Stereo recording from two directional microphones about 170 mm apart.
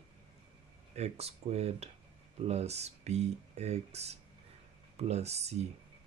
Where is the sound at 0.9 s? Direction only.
40° right (ahead or behind).